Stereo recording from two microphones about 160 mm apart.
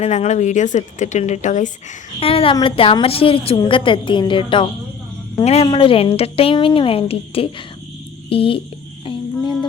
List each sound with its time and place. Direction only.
0.0 s a woman's voice: 45° left (ahead or behind)
2.2 s a woman's voice: 35° left (ahead or behind)